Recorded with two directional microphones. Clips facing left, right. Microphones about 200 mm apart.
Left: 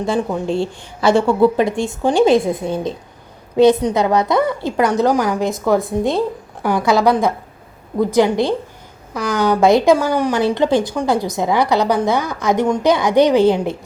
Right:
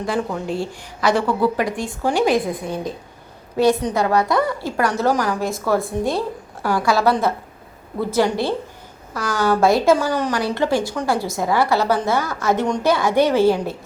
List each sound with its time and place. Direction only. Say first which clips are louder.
0.0 s a woman's voice: left 4 dB; 20° left (ahead or behind)